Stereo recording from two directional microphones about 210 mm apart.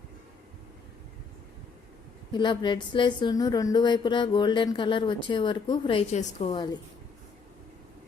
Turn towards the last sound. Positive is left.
turn(degrees=20)  # may be behind; listen again after turning